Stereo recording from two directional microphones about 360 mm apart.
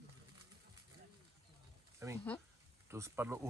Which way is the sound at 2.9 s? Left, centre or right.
Centre.